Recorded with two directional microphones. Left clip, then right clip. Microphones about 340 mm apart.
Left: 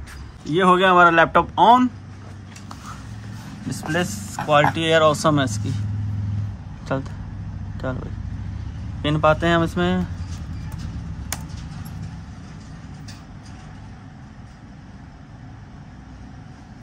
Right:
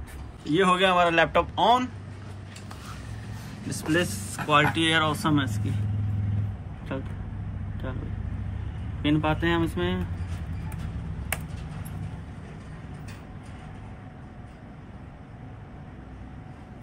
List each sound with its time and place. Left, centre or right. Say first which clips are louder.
0.5 s speech: left 6 dB; left
3.7 s speech: left 2 dB; left
6.9 s speech: left 9 dB; left
9.0 s speech: left 7 dB; left